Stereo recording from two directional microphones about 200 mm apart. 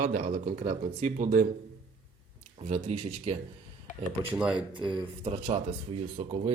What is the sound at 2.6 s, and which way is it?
Speech, 35° right (ahead or behind).